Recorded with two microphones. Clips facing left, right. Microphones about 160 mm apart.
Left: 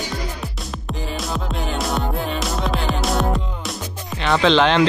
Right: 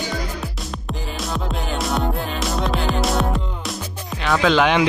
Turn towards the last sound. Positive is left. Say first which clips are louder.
# left 1 dB
turn(degrees=-10)  # may be behind; listen again after turning